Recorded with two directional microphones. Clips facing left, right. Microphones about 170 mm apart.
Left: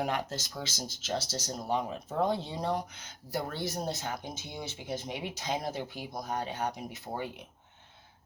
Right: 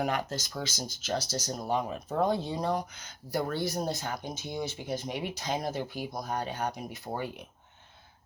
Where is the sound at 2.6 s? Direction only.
25° left (ahead or behind).